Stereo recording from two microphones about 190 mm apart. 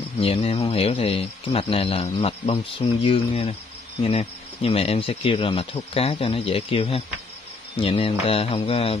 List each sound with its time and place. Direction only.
0.2 s speech: 30° left (ahead or behind)